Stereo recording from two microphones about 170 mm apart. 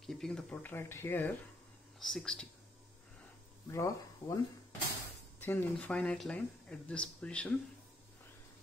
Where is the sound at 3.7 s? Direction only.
20° left (ahead or behind).